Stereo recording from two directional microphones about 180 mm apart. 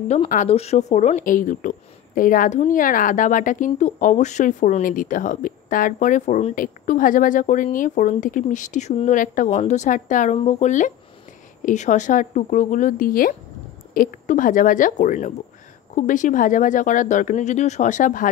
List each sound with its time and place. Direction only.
0.3 s speech: 40° left (ahead or behind)